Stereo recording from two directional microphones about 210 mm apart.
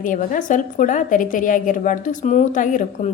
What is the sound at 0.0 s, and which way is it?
A woman's voice, 40° left (ahead or behind).